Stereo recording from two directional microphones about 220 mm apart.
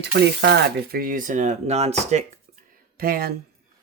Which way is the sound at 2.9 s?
40° right (ahead or behind).